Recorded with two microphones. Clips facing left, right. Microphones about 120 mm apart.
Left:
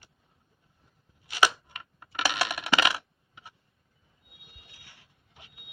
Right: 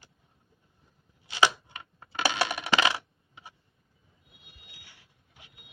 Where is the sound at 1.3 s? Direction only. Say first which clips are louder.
Even; 25° right (ahead or behind).